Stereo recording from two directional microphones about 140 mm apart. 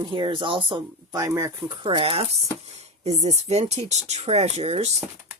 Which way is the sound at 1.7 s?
35° right (ahead or behind).